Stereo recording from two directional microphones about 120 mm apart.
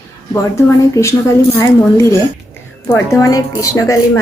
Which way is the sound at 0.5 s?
25° left (ahead or behind).